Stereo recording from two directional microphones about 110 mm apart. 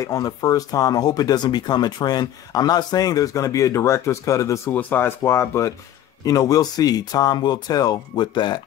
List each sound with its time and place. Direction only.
0.0 s speech: 35° left (ahead or behind)
4.6 s speech: 15° left (ahead or behind); by 8.5 s 40° left (ahead or behind)